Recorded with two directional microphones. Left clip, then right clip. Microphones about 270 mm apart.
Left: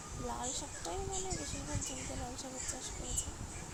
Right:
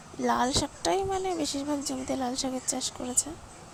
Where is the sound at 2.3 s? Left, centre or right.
Right.